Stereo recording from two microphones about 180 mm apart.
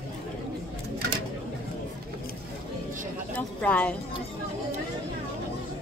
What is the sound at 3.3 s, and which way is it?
Speech, 10° left (ahead or behind).